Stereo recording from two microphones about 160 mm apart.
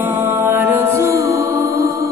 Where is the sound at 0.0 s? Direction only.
10° right (ahead or behind).